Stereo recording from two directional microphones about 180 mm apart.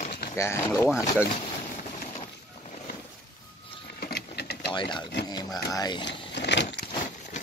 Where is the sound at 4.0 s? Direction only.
60° left (ahead or behind).